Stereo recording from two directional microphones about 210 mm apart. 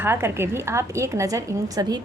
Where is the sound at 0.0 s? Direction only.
10° right (ahead or behind).